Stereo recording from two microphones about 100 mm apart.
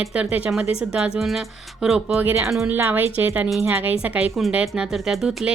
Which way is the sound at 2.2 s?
20° right (ahead or behind).